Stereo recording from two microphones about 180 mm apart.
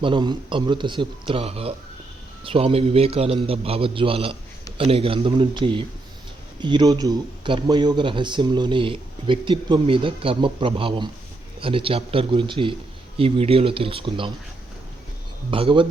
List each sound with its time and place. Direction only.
0.0 s a man's voice: 25° right (ahead or behind)
15.4 s speech: 30° right (ahead or behind)